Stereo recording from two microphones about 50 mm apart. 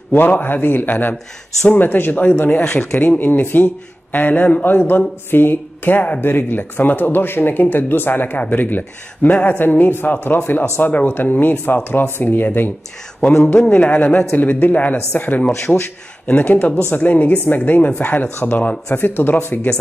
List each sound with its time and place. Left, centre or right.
0.1 s speech: left
13.2 s a man's voice: centre
13.7 s speech: left
15.7 s a man's voice: centre
16.3 s speech: left
18.9 s speech: left